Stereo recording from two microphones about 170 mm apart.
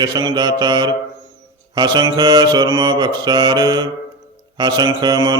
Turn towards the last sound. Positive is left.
turn(degrees=-20)  # may be behind; listen again after turning